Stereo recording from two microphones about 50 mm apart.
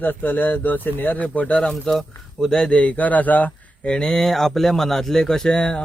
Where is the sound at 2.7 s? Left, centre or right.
Left.